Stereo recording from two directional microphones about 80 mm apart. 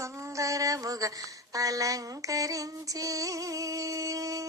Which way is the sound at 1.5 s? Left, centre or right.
Right.